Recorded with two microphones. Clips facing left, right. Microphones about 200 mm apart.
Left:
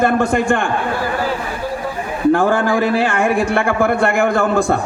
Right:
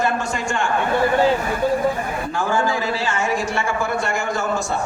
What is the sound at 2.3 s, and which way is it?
A man's voice, 60° left (ahead or behind).